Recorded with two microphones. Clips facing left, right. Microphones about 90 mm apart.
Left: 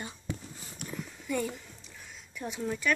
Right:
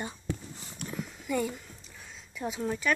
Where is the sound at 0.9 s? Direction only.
5° right (ahead or behind).